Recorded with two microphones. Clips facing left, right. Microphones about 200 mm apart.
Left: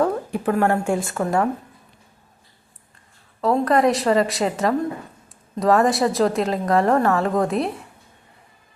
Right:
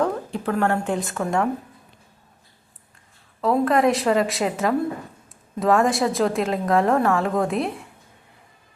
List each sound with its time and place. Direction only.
0.0 s a woman's voice: 10° left (ahead or behind)
1.0 s a woman's voice: centre (ahead or behind)
3.4 s a woman's voice: centre (ahead or behind)